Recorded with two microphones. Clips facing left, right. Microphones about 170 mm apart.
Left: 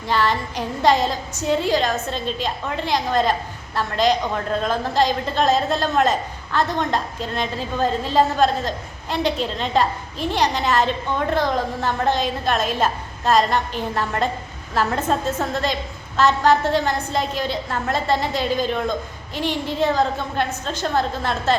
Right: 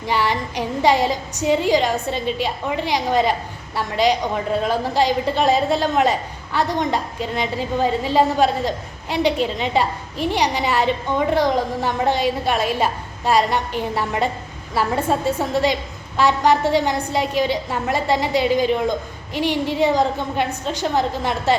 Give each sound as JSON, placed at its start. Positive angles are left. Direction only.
{"t": 0.0, "sound": "a woman's voice", "side_deg": -15}